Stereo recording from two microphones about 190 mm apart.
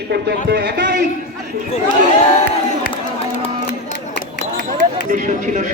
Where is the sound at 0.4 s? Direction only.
55° right (ahead or behind).